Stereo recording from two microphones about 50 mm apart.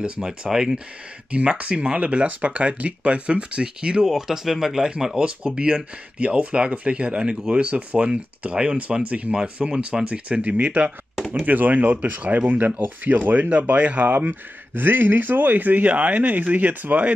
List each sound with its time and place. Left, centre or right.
0.0 s speech: right
1.3 s speech: right
4.1 s speech: centre; by 17.1 s right